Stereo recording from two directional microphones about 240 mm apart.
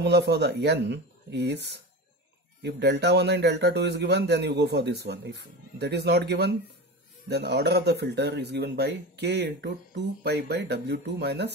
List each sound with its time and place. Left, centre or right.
0.0 s speech: right